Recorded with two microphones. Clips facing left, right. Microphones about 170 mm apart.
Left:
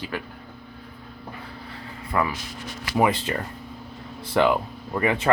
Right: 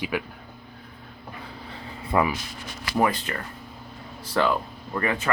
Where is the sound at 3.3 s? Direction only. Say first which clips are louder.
Left 4 dB; 25° left (ahead or behind).